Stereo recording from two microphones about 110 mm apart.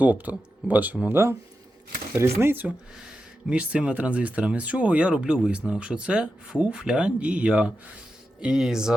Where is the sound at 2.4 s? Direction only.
15° right (ahead or behind).